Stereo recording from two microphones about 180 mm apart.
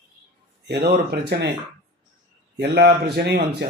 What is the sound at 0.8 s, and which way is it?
Speech, 65° right (ahead or behind).